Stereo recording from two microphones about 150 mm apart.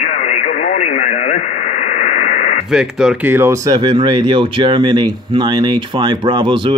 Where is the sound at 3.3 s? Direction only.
15° right (ahead or behind).